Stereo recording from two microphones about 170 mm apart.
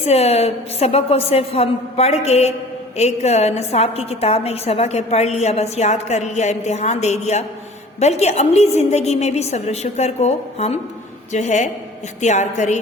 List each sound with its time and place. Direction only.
0.0 s a woman's voice: 35° left (ahead or behind)